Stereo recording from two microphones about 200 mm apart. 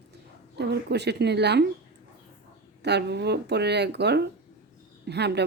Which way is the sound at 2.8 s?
55° right (ahead or behind).